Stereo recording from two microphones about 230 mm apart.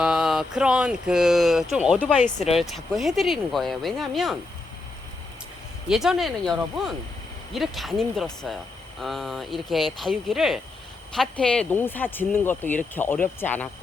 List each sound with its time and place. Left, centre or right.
0.0 s speech: centre
2.2 s speech: left
2.6 s speech: centre
5.9 s speech: centre